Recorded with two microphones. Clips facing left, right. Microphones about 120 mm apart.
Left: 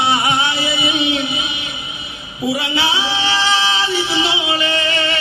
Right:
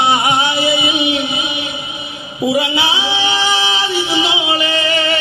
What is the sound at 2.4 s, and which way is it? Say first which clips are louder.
Speech: right 4 dB; 20° right (ahead or behind).